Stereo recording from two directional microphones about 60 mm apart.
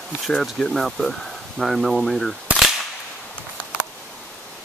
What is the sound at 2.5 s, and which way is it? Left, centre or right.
Cap gun, right.